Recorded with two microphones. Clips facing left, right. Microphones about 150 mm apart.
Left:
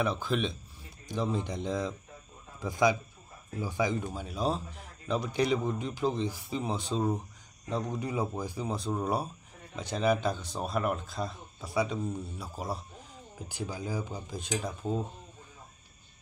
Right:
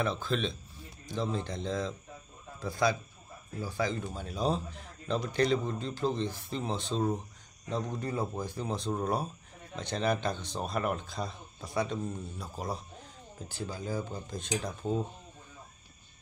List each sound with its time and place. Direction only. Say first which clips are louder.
0.0 s speech: left 1 dB; 10° left (ahead or behind)